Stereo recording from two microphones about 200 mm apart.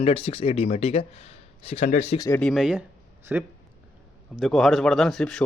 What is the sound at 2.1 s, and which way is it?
Speech, 15° left (ahead or behind).